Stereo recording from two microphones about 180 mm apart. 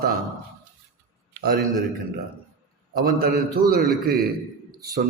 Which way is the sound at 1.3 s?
60° right (ahead or behind).